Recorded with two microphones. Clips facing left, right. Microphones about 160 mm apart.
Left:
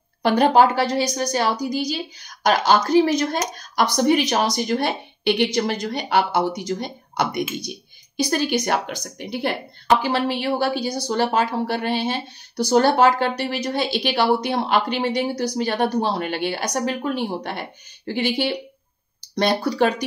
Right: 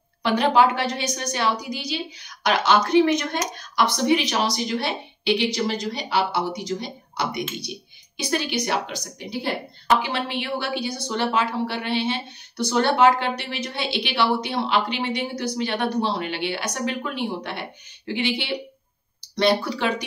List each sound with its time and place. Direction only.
0.2 s speech: 45° left (ahead or behind)
9.8 s speech: 40° left (ahead or behind)